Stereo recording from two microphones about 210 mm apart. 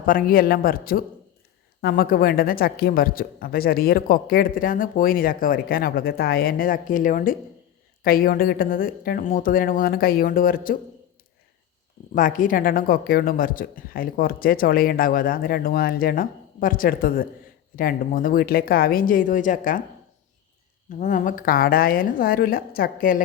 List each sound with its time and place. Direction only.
0.0 s speech: 40° left (ahead or behind)
12.1 s speech: 40° left (ahead or behind)
21.0 s speech: 40° left (ahead or behind)